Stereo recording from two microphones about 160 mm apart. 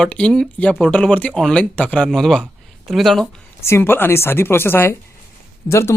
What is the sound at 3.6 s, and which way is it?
Speech, 15° left (ahead or behind).